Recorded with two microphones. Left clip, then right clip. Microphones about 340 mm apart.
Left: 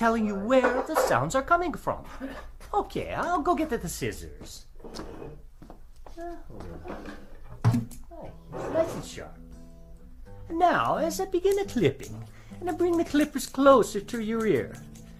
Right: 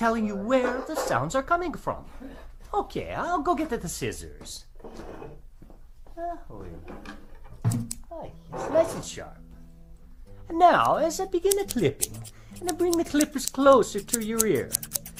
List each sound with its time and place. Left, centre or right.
0.0 s speech: centre
8.1 s roar: centre
8.5 s speech: centre
10.5 s speech: centre